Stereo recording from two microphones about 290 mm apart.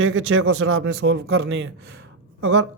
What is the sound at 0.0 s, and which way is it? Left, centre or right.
Speech, right.